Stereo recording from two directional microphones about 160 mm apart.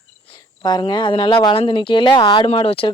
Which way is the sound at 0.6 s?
25° left (ahead or behind).